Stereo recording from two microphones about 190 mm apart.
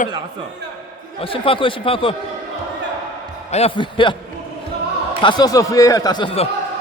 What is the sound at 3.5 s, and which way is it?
Speech, 30° left (ahead or behind).